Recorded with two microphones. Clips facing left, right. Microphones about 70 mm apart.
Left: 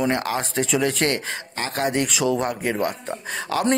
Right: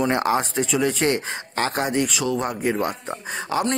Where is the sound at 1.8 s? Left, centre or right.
Centre.